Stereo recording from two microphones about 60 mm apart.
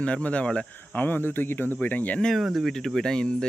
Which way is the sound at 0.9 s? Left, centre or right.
Left.